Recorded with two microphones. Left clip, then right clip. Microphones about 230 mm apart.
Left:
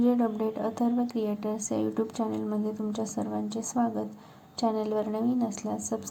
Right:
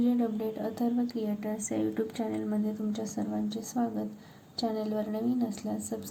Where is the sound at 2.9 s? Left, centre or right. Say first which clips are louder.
Left 3 dB; centre.